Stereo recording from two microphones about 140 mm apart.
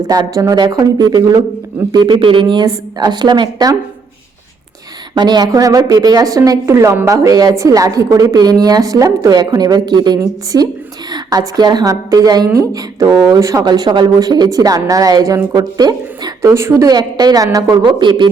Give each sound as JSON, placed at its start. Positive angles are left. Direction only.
{"t": 0.0, "sound": "a woman's voice", "side_deg": -25}
{"t": 5.1, "sound": "a woman's voice", "side_deg": -30}